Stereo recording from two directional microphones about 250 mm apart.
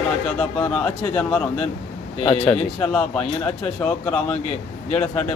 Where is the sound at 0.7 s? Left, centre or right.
Centre.